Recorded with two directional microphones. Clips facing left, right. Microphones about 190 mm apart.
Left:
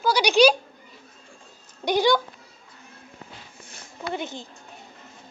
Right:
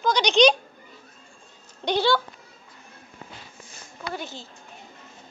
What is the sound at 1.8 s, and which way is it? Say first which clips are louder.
Speech: left 2 dB; 10° left (ahead or behind).